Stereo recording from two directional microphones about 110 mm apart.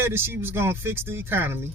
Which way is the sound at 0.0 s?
20° right (ahead or behind).